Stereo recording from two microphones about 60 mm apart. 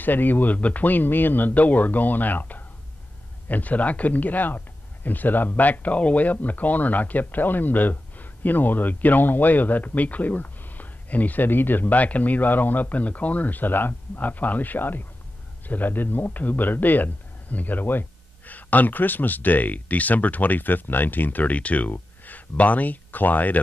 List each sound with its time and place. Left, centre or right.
0.0 s speech: left